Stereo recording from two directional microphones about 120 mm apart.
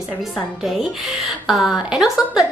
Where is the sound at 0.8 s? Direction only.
Centre (ahead or behind).